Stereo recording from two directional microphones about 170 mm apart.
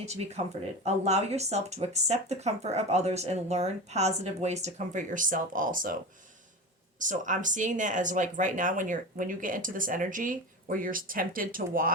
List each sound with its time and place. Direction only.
0.0 s speech: 40° right (ahead or behind)
7.0 s speech: 50° right (ahead or behind)